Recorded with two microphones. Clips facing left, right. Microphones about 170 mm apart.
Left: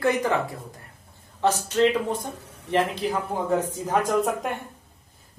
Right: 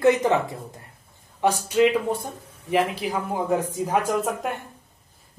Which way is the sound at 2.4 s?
75° left (ahead or behind).